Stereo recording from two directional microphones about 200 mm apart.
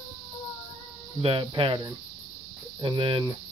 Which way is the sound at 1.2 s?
25° right (ahead or behind).